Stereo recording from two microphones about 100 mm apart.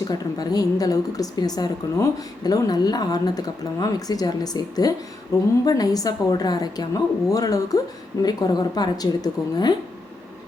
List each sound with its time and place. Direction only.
0.0 s a woman's voice: 40° left (ahead or behind)